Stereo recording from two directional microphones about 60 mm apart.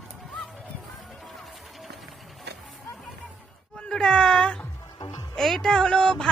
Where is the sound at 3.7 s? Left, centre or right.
Centre.